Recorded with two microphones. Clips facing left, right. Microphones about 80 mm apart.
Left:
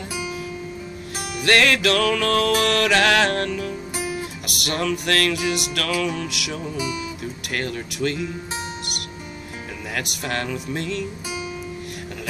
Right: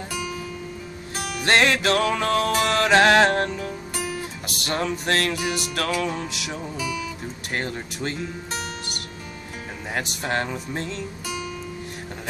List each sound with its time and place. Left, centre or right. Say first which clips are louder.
1.4 s music: left 1 dB; right
3.9 s music: left 1 dB; centre
4.5 s music: left 2 dB; right
9.9 s music: right 2 dB; right